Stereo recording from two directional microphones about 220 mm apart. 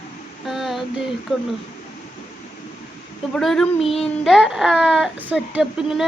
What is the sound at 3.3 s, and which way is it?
Speech, centre (ahead or behind).